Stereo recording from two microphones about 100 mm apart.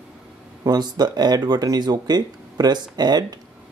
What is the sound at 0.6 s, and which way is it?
Speech, 40° right (ahead or behind).